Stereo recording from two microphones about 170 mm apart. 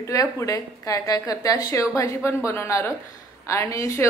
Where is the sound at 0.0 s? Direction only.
20° left (ahead or behind).